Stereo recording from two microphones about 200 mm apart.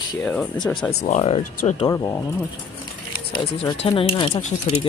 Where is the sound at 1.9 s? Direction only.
15° left (ahead or behind).